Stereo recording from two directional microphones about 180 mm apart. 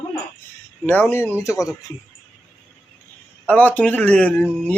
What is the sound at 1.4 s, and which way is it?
Speech, 15° left (ahead or behind).